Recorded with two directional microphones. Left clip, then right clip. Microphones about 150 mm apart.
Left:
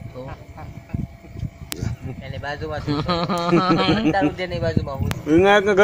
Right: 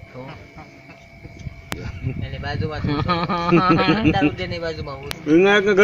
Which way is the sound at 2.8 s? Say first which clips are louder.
Right 1 dB; 60° left (ahead or behind).